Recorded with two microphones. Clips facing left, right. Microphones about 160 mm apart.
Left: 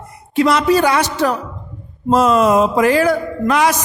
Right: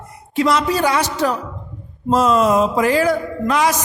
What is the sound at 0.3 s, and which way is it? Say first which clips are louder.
A woman's voice: left 4 dB; 65° left (ahead or behind).